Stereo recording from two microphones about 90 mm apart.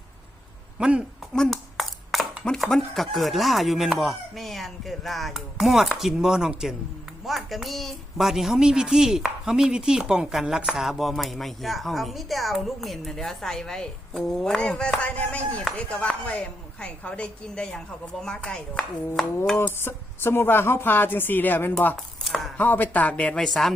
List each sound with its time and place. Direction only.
0.8 s a man's voice: 10° right (ahead or behind)
1.3 s a woman's voice: 5° left (ahead or behind)
19.5 s speech: 25° left (ahead or behind)
21.9 s a sound: centre (ahead or behind)
22.5 s speech: 20° left (ahead or behind); by 23.7 s 5° left (ahead or behind)